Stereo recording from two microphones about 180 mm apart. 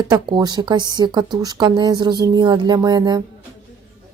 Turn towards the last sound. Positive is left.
turn(degrees=-20)  # may be behind; listen again after turning